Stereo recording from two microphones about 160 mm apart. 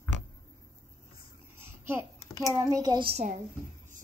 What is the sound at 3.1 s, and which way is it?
Speech, 50° right (ahead or behind).